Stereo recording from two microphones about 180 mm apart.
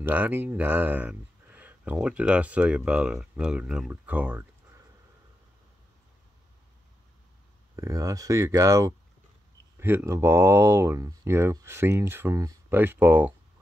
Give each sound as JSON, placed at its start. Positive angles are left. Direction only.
{"t": 0.0, "sound": "speech", "side_deg": -10}
{"t": 7.7, "sound": "speech", "side_deg": -15}